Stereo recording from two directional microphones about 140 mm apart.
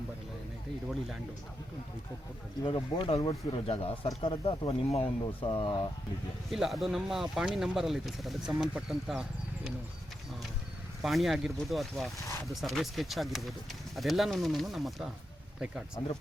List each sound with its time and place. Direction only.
2.6 s speech: 40° left (ahead or behind)
6.5 s speech: centre (ahead or behind)
11.0 s speech: centre (ahead or behind)
16.0 s speech: 30° left (ahead or behind)